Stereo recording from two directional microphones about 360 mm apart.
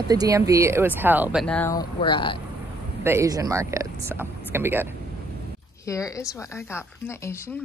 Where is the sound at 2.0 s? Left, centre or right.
Centre.